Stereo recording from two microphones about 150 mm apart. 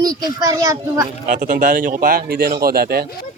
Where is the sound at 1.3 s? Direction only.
60° right (ahead or behind); by 3.1 s 90° right.